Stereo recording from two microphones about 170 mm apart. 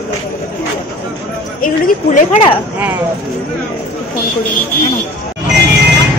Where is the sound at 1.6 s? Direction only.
50° left (ahead or behind).